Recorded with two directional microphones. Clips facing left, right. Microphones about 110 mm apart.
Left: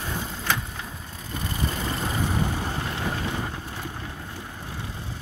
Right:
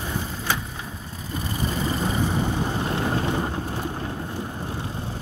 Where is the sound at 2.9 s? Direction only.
35° right (ahead or behind).